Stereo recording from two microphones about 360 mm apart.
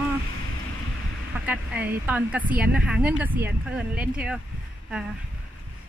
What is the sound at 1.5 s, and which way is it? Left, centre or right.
Speech, centre.